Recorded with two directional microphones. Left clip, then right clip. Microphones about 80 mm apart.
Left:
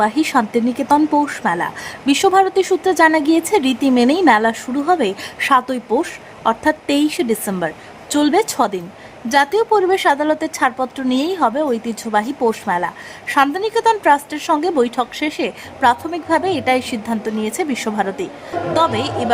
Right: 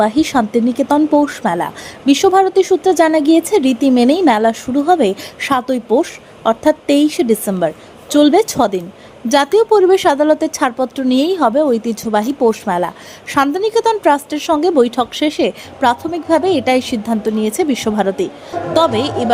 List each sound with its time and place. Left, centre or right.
0.0 s speech: right
2.1 s speech: centre
9.3 s a woman's voice: right
15.1 s a woman's voice: right